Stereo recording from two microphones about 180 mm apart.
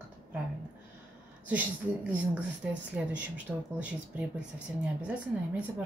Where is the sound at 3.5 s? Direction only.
Centre (ahead or behind).